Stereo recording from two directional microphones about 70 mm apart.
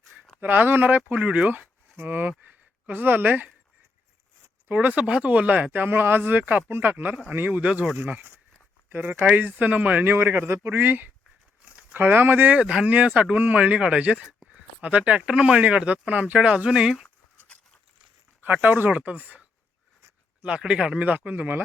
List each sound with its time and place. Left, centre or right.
0.3 s speech: right
4.7 s speech: right
11.6 s a sound: centre
11.9 s speech: right
12.6 s speech: centre
12.9 s speech: centre
18.4 s speech: right